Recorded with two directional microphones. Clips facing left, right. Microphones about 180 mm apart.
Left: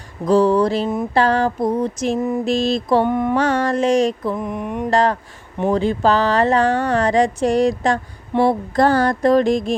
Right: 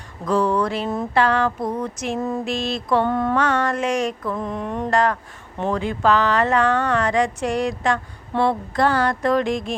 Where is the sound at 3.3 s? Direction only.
35° left (ahead or behind).